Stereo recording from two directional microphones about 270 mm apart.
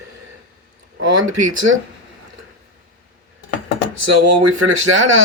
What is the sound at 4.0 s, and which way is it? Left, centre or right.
Speech, right.